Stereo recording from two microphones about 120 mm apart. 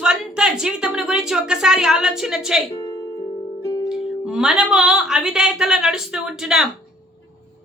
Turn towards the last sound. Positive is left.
turn(degrees=-5)  # may be behind; listen again after turning